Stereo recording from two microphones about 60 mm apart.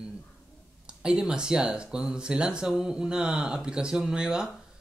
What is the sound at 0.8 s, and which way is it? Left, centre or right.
Speech, centre.